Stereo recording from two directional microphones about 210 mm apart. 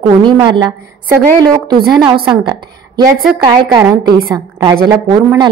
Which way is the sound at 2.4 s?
20° right (ahead or behind).